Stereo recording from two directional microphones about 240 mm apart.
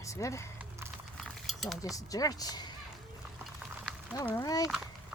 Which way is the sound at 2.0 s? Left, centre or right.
Centre.